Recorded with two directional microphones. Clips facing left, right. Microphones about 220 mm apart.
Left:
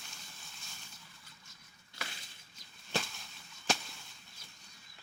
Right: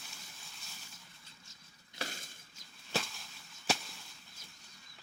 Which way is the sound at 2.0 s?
45° right (ahead or behind).